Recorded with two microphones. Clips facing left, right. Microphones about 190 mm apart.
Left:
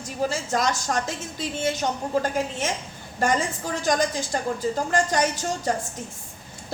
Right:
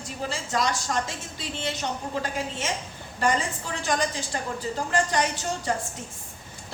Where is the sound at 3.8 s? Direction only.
45° left (ahead or behind).